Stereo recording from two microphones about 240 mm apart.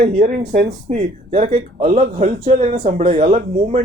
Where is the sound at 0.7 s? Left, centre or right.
Right.